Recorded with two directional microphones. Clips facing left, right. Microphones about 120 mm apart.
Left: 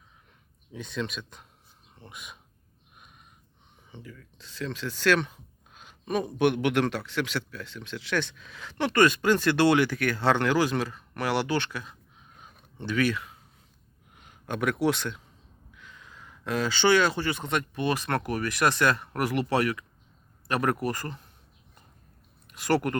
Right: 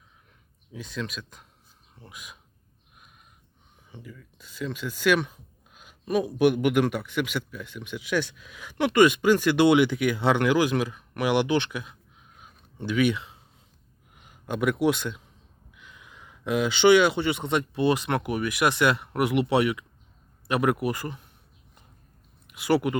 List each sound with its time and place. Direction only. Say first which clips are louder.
0.7 s speech: left 1 dB; centre (ahead or behind)
4.0 s speech: right 1 dB; 5° right (ahead or behind); by 13.4 s 25° right (ahead or behind)
14.2 s speech: right 2 dB; 10° right (ahead or behind)
20.5 s speech: right 3 dB; 5° right (ahead or behind)
22.4 s speech: right 2 dB; 10° right (ahead or behind)